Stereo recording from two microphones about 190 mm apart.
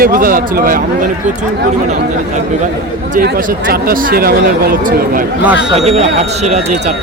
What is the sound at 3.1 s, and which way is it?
Speech, 50° right (ahead or behind).